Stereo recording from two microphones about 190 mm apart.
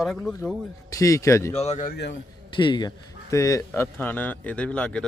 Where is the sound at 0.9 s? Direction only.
15° left (ahead or behind).